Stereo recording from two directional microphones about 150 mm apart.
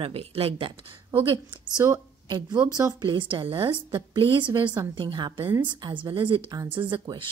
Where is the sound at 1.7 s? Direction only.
20° right (ahead or behind).